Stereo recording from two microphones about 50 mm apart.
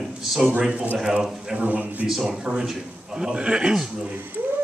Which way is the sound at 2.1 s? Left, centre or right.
Centre.